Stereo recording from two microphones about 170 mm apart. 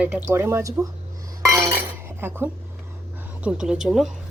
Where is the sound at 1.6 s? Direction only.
15° right (ahead or behind).